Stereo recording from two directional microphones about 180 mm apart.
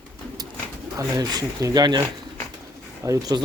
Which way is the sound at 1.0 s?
20° right (ahead or behind).